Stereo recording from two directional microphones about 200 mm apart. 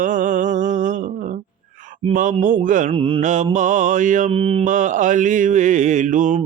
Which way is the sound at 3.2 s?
40° right (ahead or behind).